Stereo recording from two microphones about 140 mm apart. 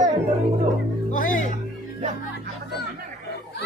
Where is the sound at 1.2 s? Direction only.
70° left (ahead or behind).